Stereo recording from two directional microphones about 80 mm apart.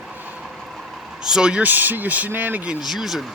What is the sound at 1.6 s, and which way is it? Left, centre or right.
Speech, right.